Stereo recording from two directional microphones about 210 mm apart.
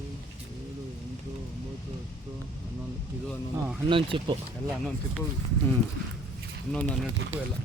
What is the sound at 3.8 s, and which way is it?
Speech, 25° right (ahead or behind).